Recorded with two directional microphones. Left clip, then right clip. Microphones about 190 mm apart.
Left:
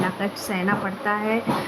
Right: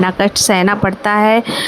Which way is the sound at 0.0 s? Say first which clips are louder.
Right 12 dB; 55° right (ahead or behind).